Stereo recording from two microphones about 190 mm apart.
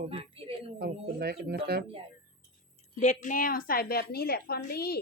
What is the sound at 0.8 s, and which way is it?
Speech, 55° right (ahead or behind).